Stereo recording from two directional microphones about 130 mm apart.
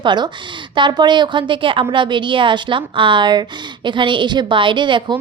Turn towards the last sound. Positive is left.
turn(degrees=-40)  # may be behind; listen again after turning